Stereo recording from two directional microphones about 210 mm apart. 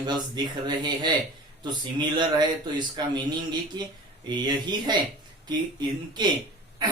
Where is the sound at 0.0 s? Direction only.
20° right (ahead or behind).